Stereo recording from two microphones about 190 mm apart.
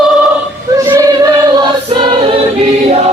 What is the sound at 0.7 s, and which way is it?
Female singing, 15° right (ahead or behind).